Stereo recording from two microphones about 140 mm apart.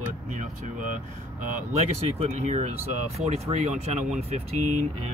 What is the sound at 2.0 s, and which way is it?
Speech, 45° right (ahead or behind).